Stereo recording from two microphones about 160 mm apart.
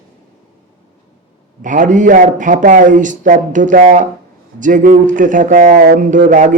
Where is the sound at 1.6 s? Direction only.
55° right (ahead or behind).